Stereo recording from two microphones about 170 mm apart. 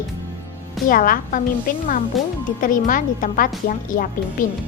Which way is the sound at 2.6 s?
50° left (ahead or behind).